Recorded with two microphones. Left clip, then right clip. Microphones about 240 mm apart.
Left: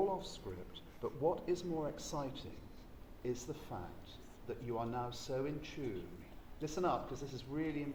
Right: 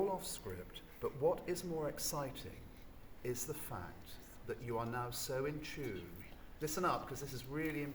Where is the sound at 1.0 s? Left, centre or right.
Right.